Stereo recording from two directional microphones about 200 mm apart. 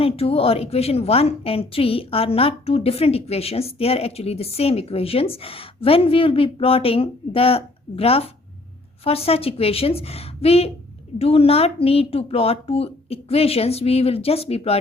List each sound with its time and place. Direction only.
0.0 s a woman's voice: 30° left (ahead or behind)